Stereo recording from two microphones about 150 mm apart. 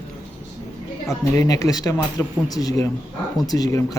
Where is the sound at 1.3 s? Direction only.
20° left (ahead or behind).